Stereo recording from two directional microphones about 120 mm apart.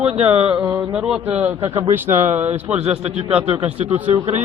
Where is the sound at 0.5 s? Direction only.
10° right (ahead or behind).